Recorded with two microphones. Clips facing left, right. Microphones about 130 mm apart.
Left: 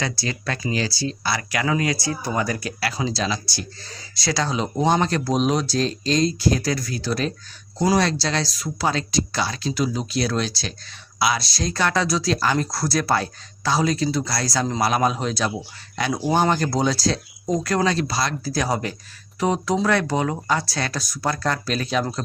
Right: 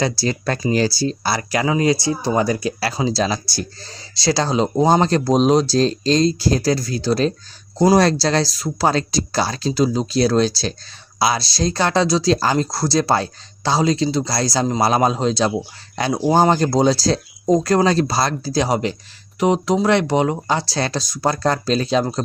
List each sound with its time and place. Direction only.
0.0 s speech: 35° right (ahead or behind)